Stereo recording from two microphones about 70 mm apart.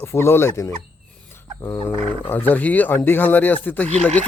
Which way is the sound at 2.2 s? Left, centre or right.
Left.